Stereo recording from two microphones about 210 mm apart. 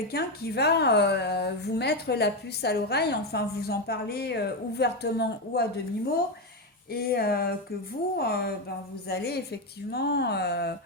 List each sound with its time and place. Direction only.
0.1 s a woman's voice: 50° left (ahead or behind)
6.9 s a woman's voice: 45° left (ahead or behind)